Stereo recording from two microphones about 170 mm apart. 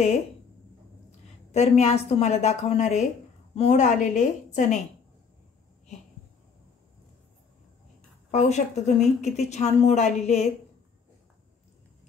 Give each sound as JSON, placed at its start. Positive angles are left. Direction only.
{"t": 1.5, "sound": "a woman's voice", "side_deg": 40}
{"t": 8.3, "sound": "a woman's voice", "side_deg": 40}